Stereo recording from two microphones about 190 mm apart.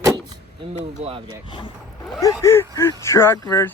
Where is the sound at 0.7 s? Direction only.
35° right (ahead or behind).